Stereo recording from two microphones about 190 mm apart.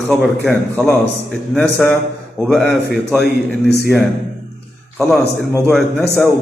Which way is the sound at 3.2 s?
60° left (ahead or behind).